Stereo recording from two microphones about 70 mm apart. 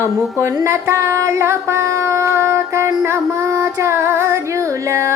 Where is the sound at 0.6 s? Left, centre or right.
Right.